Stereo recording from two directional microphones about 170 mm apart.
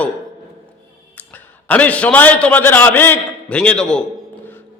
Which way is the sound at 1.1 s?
10° left (ahead or behind).